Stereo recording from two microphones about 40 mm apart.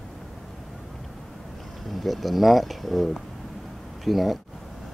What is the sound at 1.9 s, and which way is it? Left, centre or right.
Speech, centre.